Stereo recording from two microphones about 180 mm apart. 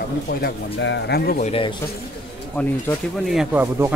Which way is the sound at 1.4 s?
30° left (ahead or behind).